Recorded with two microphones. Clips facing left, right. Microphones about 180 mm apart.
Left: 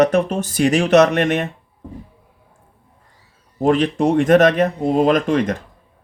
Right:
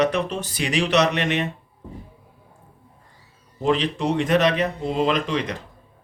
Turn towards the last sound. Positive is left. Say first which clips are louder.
# left 7 dB
turn(degrees=50)  # may be behind; listen again after turning